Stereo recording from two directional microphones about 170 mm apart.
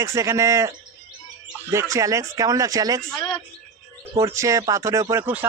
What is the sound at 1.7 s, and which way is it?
A man's voice, 15° right (ahead or behind).